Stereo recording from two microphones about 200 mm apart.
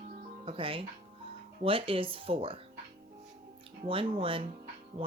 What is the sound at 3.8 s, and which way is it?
Speech, 25° right (ahead or behind).